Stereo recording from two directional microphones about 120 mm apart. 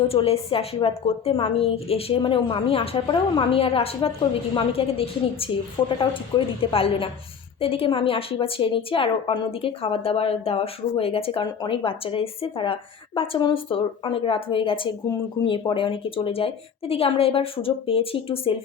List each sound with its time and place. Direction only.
0.1 s a woman's voice: 55° left (ahead or behind)